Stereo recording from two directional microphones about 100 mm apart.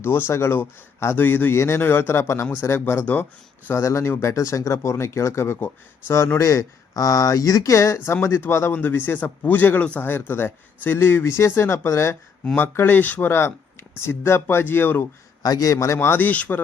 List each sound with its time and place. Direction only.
0.0 s a man's voice: 25° left (ahead or behind)
15.4 s a man's voice: 40° left (ahead or behind); by 16.6 s 15° left (ahead or behind)